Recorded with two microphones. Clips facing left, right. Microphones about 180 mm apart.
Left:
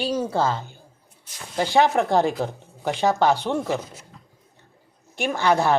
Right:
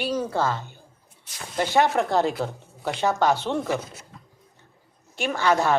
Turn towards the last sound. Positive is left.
turn(degrees=15)  # may be behind; listen again after turning